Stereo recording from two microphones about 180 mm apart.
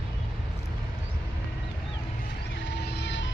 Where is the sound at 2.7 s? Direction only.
70° left (ahead or behind).